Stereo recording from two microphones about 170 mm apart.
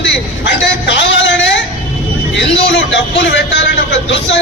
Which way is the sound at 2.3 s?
90° left.